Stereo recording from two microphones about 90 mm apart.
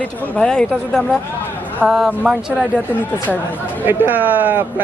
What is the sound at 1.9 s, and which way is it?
Speech, 10° right (ahead or behind).